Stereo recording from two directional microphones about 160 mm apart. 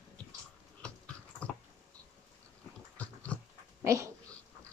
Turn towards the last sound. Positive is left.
turn(degrees=-20)  # may be behind; listen again after turning